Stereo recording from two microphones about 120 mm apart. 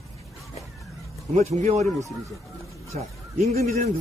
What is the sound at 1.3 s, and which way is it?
Speech, 75° right (ahead or behind).